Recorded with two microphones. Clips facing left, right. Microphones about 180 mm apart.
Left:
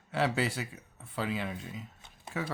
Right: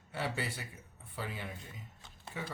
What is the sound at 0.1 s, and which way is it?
Speech, 90° left.